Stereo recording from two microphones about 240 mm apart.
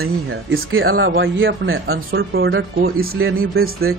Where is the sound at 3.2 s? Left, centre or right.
Right.